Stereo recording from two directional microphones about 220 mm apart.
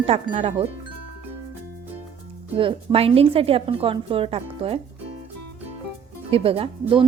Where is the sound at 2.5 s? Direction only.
25° right (ahead or behind).